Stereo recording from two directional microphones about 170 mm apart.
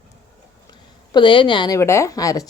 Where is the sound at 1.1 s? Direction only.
30° left (ahead or behind).